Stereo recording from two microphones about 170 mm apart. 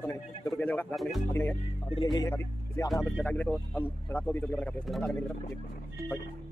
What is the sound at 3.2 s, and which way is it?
Speech, 10° left (ahead or behind).